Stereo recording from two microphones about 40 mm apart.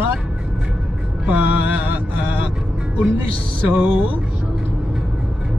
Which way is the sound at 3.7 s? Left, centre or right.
Right.